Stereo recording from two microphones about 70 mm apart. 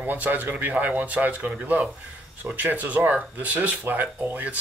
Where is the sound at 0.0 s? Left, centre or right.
Right.